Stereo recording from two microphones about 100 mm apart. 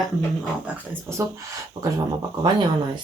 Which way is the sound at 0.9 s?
30° right (ahead or behind).